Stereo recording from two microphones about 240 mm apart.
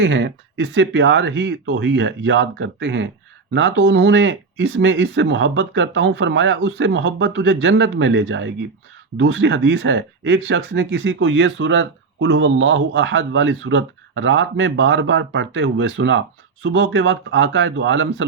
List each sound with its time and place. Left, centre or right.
0.0 s speech: right